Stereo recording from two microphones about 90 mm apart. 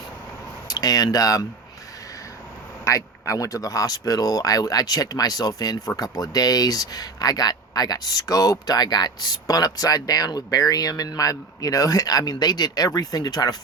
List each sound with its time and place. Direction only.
0.7 s speech: 45° left (ahead or behind)
2.8 s speech: 35° left (ahead or behind)